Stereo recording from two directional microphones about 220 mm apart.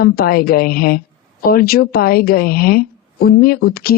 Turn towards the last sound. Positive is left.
turn(degrees=45)  # may be behind; listen again after turning